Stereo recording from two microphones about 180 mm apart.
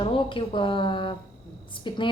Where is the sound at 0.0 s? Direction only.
30° left (ahead or behind).